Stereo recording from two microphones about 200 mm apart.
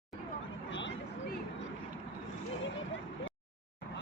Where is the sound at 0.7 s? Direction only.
65° left (ahead or behind).